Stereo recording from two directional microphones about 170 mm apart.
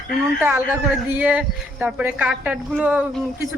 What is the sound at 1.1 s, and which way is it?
Speech, 10° right (ahead or behind).